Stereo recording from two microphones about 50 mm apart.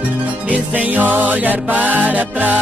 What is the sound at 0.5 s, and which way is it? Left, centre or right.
Music, right.